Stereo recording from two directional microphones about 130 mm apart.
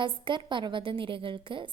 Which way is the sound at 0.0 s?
40° right (ahead or behind).